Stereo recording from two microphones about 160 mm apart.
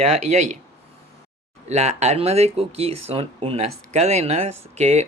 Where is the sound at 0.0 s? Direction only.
45° right (ahead or behind).